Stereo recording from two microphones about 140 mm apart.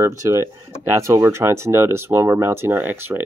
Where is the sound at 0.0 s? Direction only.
20° right (ahead or behind).